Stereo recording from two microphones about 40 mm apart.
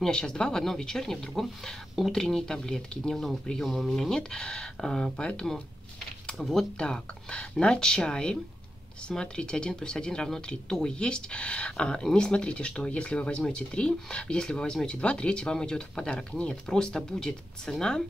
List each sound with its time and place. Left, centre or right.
0.0 s speech: centre
4.1 s speech: centre
5.1 s speech: left
6.8 s speech: left